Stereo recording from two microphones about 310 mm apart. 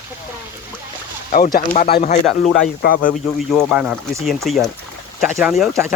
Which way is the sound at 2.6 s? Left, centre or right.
Left.